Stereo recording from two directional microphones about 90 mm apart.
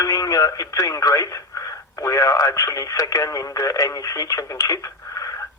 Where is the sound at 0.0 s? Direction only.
40° left (ahead or behind).